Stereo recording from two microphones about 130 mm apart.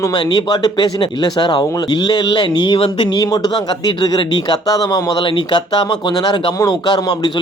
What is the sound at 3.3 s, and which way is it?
Speech, 30° left (ahead or behind).